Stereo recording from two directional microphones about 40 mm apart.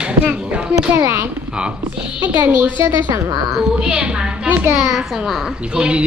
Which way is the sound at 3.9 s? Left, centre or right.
Right.